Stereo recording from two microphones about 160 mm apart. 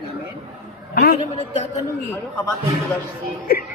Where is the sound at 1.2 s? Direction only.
45° left (ahead or behind).